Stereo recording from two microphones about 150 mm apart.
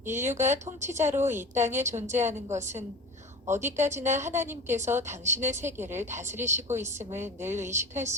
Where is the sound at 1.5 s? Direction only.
55° right (ahead or behind).